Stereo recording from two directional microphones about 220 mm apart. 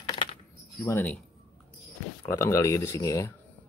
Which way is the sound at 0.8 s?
10° left (ahead or behind).